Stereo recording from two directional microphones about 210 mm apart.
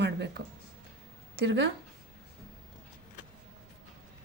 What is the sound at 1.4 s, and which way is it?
Speech, 55° right (ahead or behind).